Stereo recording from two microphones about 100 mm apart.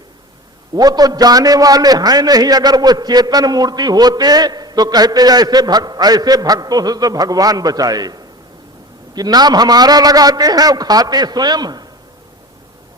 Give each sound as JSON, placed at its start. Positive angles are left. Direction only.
{"t": 0.7, "sound": "a man's voice", "side_deg": -40}